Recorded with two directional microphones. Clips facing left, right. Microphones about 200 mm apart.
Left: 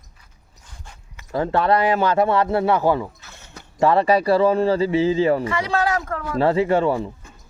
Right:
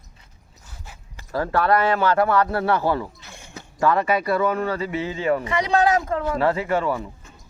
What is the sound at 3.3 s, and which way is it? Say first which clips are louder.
Mechanisms: right 3 dB; 10° right (ahead or behind).